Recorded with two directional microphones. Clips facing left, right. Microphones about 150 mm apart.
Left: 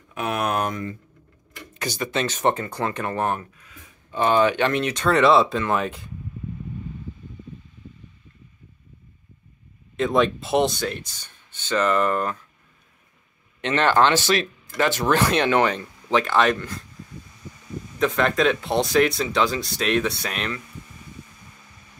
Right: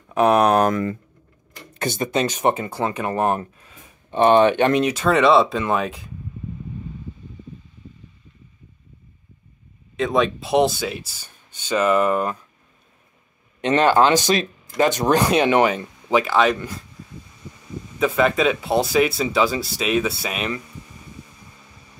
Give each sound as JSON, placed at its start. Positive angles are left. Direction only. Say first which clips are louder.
{"t": 0.1, "sound": "a sound", "louder": "right 9 dB", "side_deg": -40}
{"t": 1.8, "sound": "speech", "louder": "right 4 dB", "side_deg": -25}
{"t": 2.1, "sound": "speech", "louder": "right 2 dB", "side_deg": -10}
{"t": 3.3, "sound": "speech", "louder": "right 6 dB", "side_deg": -30}
{"t": 4.9, "sound": "speech", "louder": "left 2 dB", "side_deg": -5}
{"t": 9.9, "sound": "speech", "louder": "even", "side_deg": 0}
{"t": 13.7, "sound": "speech", "louder": "right 3 dB", "side_deg": -10}
{"t": 16.5, "sound": "speech", "louder": "right 1 dB", "side_deg": -10}
{"t": 17.9, "sound": "speech", "louder": "right 2 dB", "side_deg": -5}